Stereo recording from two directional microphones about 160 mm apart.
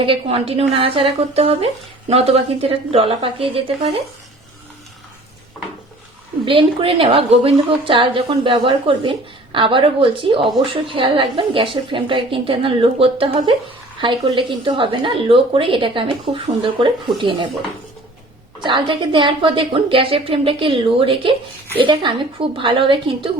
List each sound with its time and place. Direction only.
0.0 s a woman's voice: 35° right (ahead or behind)
6.4 s a woman's voice: 30° right (ahead or behind)
18.6 s a woman's voice: 30° right (ahead or behind)